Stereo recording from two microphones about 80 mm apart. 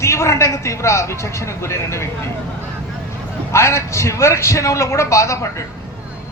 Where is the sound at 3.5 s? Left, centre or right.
Left.